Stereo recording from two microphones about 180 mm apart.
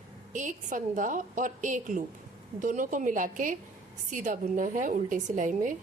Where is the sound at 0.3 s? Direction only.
45° right (ahead or behind).